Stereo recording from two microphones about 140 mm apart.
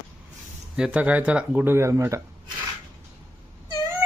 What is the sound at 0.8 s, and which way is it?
Speech, 10° right (ahead or behind).